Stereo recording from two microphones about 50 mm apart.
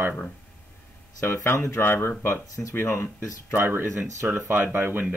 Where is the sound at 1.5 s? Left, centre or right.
Left.